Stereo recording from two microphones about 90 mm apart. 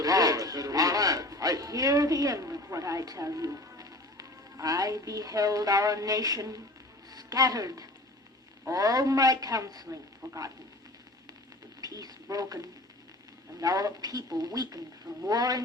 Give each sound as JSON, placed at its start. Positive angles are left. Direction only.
{"t": 0.0, "sound": "a sound", "side_deg": -40}
{"t": 7.1, "sound": "a man's voice", "side_deg": -45}
{"t": 11.8, "sound": "speech", "side_deg": -45}